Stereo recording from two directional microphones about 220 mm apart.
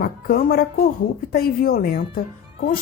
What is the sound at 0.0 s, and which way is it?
A woman's voice, 40° left (ahead or behind).